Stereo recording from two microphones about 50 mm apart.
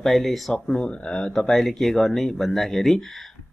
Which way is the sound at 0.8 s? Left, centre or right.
Left.